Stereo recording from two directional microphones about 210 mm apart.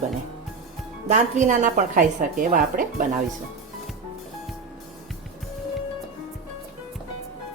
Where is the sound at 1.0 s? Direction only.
35° right (ahead or behind).